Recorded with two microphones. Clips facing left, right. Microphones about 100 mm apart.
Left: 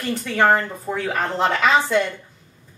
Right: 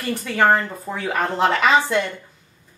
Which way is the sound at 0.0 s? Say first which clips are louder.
Even; 5° right (ahead or behind).